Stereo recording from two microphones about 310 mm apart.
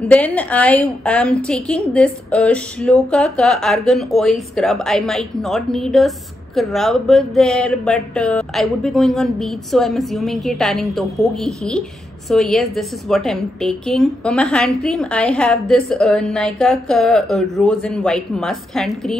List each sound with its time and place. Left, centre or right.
0.1 s a woman's voice: centre